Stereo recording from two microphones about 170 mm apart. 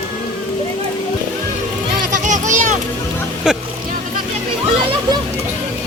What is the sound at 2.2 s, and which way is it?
Vehicle, 45° right (ahead or behind).